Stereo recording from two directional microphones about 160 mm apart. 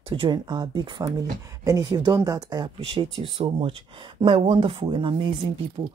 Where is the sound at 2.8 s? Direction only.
35° right (ahead or behind).